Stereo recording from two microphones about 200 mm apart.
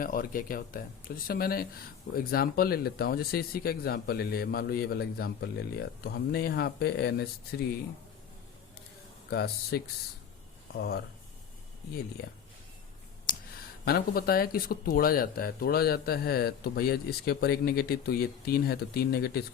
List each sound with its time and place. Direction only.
0.0 s speech: 45° left (ahead or behind)
9.3 s speech: 50° left (ahead or behind)
13.8 s speech: 50° left (ahead or behind)